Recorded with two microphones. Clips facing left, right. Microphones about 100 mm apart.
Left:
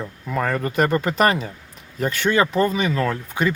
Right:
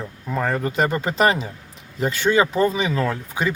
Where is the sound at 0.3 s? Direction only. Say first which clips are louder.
Even; 10° right (ahead or behind).